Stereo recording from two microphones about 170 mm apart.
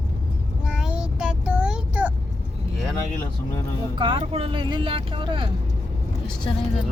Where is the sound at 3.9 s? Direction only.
30° right (ahead or behind).